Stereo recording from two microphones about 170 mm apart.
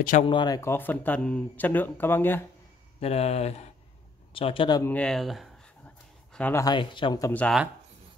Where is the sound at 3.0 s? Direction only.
35° left (ahead or behind).